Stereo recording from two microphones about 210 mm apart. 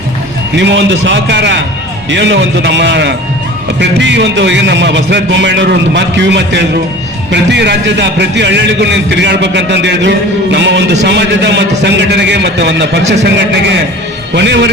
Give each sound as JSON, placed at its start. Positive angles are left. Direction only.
{"t": 0.5, "sound": "a man's voice", "side_deg": -55}